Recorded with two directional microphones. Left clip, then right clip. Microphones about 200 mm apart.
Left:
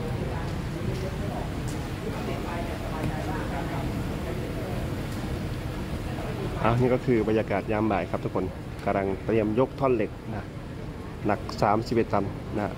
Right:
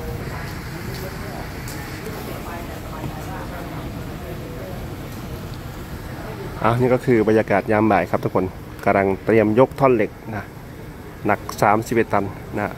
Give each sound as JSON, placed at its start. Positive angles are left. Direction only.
{"t": 6.6, "sound": "speech", "side_deg": -25}